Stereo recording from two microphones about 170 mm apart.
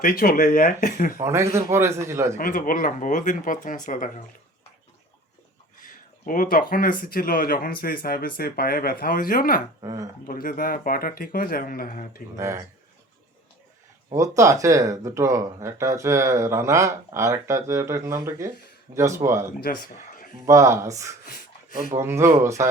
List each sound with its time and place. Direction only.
0.0 s speech: 60° left (ahead or behind)
1.2 s speech: 15° right (ahead or behind)
2.4 s speech: 55° left (ahead or behind)
5.8 s a sound: 55° left (ahead or behind)
7.0 s speech: 55° left (ahead or behind)
9.8 s speech: 20° right (ahead or behind)
10.2 s speech: 55° left (ahead or behind)
12.4 s speech: 15° right (ahead or behind)
14.1 s speech: 20° right (ahead or behind)
19.5 s speech: 60° left (ahead or behind)
20.5 s speech: 20° right (ahead or behind)